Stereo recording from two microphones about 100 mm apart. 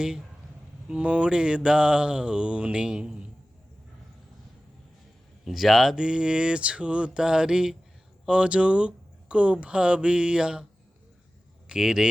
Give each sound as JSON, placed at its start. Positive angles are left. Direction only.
{"t": 0.9, "sound": "speech", "side_deg": -10}
{"t": 5.5, "sound": "speech", "side_deg": 0}
{"t": 11.7, "sound": "speech", "side_deg": -10}